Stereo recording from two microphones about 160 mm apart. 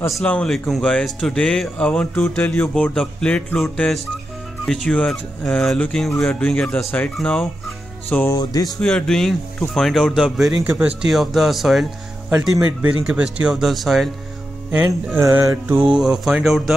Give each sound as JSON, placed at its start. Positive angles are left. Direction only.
{"t": 0.1, "sound": "speech", "side_deg": 5}
{"t": 8.4, "sound": "speech", "side_deg": 25}
{"t": 8.8, "sound": "speech", "side_deg": 5}
{"t": 13.1, "sound": "speech", "side_deg": -5}
{"t": 14.7, "sound": "music", "side_deg": -10}
{"t": 15.8, "sound": "speech", "side_deg": -5}